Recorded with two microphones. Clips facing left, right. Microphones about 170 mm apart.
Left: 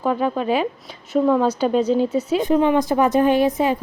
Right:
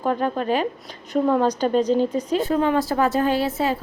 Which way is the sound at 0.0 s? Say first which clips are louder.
Left 2 dB; 5° left (ahead or behind).